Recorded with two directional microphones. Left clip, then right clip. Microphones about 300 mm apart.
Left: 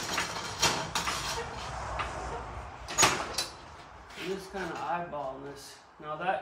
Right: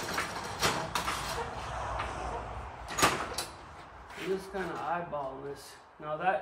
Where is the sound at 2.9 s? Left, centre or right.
Centre.